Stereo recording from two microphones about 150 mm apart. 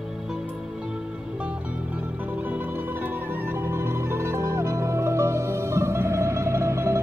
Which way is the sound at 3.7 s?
15° right (ahead or behind).